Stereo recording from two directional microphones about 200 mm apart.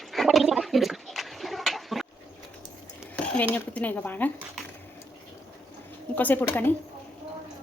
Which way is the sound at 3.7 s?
10° left (ahead or behind).